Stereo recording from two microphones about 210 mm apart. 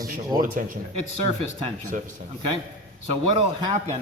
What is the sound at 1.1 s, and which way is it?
Speech, 30° right (ahead or behind).